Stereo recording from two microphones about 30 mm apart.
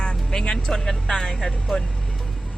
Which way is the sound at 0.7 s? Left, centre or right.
Centre.